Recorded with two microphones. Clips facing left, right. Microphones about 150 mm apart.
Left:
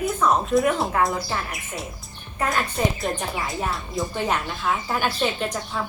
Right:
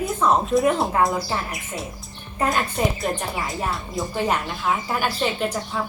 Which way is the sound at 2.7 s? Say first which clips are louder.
Right 1 dB; centre (ahead or behind).